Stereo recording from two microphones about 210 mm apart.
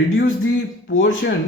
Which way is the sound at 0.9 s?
65° left (ahead or behind).